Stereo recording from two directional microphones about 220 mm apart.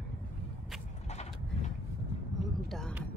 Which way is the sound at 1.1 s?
30° left (ahead or behind).